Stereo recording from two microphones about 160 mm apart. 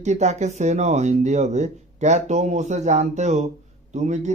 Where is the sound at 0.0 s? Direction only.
45° right (ahead or behind).